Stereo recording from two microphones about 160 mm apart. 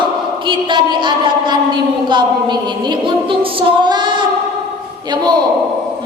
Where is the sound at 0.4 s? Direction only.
30° right (ahead or behind).